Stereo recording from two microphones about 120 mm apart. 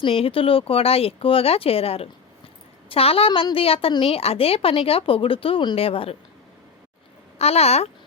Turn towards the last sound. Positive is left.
turn(degrees=60)  # may be behind; listen again after turning